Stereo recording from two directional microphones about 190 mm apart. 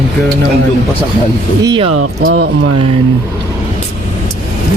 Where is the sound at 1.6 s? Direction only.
25° right (ahead or behind).